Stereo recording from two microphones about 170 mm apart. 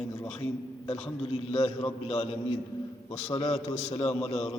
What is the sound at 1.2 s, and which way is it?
A man's voice, 35° left (ahead or behind).